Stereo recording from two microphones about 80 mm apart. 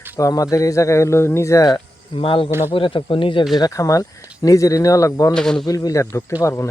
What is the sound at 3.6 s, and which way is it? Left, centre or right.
Speech, left.